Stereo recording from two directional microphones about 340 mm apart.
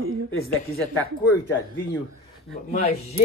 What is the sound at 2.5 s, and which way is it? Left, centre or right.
Speech, left.